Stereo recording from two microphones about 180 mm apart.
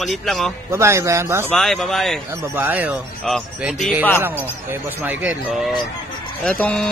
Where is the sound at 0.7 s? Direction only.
15° right (ahead or behind).